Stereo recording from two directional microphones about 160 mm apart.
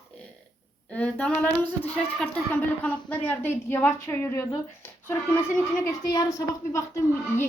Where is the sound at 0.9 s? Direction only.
10° left (ahead or behind).